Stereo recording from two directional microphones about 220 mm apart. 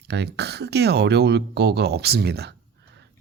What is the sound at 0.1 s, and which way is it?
Speech, 50° right (ahead or behind).